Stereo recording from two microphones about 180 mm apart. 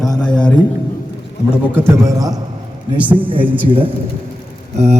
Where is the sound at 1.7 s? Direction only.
15° right (ahead or behind).